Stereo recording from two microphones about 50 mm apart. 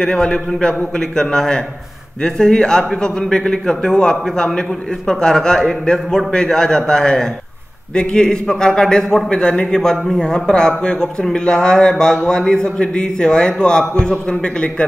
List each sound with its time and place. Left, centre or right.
0.0 s a man's voice: centre